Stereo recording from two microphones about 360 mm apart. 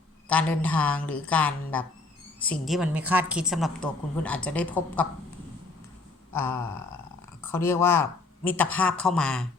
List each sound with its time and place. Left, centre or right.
0.3 s a woman's voice: centre
6.3 s a sound: centre
7.4 s a woman's voice: centre